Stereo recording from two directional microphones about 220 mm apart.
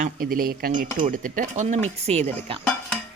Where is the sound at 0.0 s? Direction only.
40° right (ahead or behind).